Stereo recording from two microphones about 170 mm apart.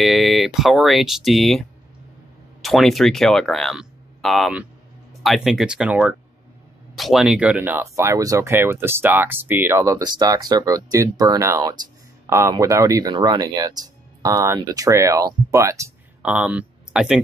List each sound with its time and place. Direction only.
0.0 s speech: centre (ahead or behind)
2.6 s speech: centre (ahead or behind); by 15.9 s 15° right (ahead or behind)
16.2 s speech: 5° right (ahead or behind)